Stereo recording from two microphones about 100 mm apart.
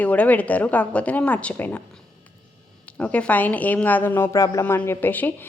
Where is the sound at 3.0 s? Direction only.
15° left (ahead or behind); by 4.7 s 30° left (ahead or behind).